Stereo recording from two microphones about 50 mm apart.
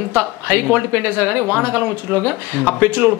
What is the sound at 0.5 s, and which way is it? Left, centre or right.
Speech, right.